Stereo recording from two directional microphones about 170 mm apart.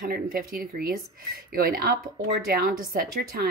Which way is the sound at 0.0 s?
60° right (ahead or behind).